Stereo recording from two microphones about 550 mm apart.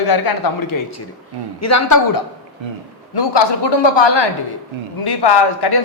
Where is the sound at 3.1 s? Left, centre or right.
Left.